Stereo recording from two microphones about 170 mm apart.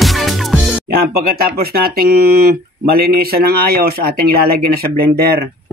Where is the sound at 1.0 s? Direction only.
60° right (ahead or behind).